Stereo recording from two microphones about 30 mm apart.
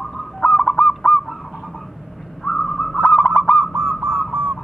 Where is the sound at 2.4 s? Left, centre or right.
Centre.